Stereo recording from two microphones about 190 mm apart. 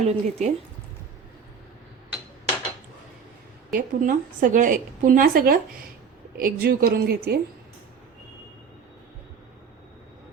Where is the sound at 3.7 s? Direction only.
45° right (ahead or behind).